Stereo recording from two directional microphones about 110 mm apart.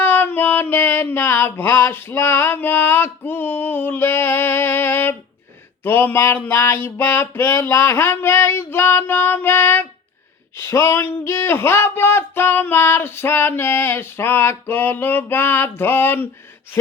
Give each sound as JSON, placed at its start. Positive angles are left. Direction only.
{"t": 0.0, "sound": "music", "side_deg": 20}
{"t": 5.8, "sound": "speech", "side_deg": 20}